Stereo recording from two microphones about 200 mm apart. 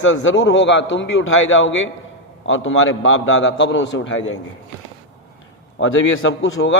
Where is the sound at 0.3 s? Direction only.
70° left (ahead or behind).